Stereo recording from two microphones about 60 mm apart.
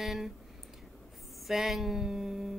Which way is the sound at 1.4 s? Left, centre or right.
Centre.